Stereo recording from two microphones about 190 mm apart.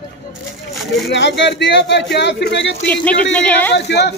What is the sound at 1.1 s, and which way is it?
Speech, 65° left (ahead or behind).